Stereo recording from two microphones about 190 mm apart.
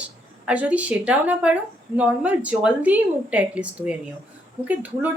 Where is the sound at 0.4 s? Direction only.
10° right (ahead or behind).